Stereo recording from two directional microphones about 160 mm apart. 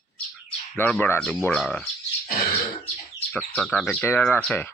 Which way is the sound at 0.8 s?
10° left (ahead or behind).